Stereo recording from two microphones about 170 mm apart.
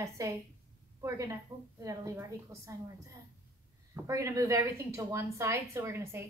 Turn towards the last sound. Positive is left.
turn(degrees=-15)  # may be behind; listen again after turning